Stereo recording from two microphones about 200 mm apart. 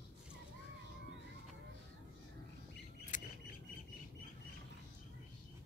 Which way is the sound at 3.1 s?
40° left (ahead or behind).